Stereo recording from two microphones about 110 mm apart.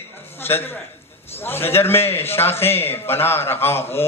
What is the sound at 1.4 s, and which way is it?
A man's voice, 20° left (ahead or behind).